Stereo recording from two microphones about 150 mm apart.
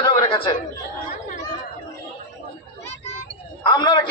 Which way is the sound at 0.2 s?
35° left (ahead or behind).